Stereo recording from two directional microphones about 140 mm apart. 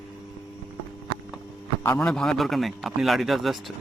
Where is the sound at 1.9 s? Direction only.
5° left (ahead or behind).